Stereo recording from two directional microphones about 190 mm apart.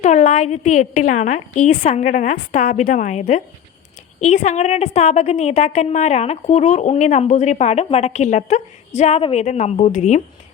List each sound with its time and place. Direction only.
0.0 s a woman's voice: 40° left (ahead or behind)